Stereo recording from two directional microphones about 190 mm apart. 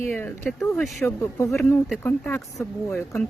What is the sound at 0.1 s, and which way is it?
A woman's voice, 10° left (ahead or behind).